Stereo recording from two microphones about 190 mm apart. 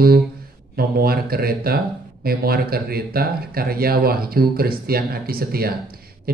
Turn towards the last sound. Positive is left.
turn(degrees=-55)  # may be behind; listen again after turning